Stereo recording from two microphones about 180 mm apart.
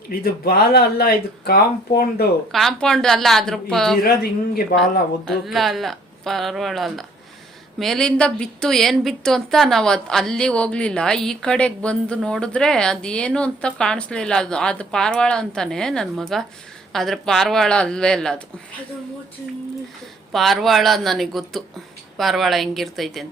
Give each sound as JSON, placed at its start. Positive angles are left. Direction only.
{"t": 0.1, "sound": "speech", "side_deg": 60}
{"t": 2.5, "sound": "a woman's voice", "side_deg": 0}
{"t": 4.0, "sound": "speech", "side_deg": 55}
{"t": 5.3, "sound": "a woman's voice", "side_deg": 0}
{"t": 20.3, "sound": "a woman's voice", "side_deg": 0}